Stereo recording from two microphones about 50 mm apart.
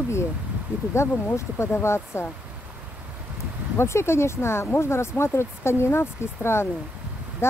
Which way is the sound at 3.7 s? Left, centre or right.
Left.